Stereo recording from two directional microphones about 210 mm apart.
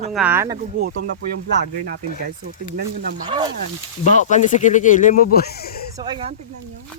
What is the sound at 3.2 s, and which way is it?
Speech, 20° right (ahead or behind).